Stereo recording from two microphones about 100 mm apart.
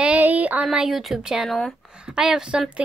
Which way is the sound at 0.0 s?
15° right (ahead or behind).